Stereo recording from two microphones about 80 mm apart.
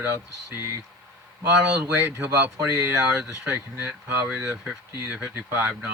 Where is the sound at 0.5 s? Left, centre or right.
Right.